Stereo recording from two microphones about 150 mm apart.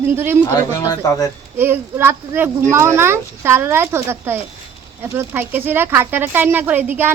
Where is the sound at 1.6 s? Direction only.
15° right (ahead or behind).